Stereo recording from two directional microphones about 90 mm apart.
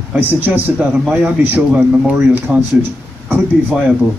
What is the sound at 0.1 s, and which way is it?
Speech, 20° right (ahead or behind).